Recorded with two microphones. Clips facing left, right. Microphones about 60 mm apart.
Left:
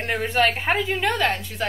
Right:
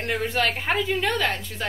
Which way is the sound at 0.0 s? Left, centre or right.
Centre.